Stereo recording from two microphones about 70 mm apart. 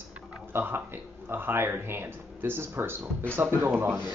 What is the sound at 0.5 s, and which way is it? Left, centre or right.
Speech, right.